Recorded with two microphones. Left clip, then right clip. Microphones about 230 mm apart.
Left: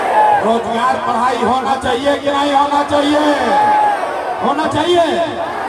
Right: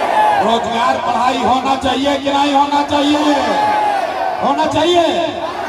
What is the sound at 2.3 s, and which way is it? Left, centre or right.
A man's voice, right.